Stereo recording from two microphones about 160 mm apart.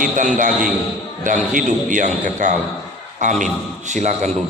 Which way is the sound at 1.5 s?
55° right (ahead or behind).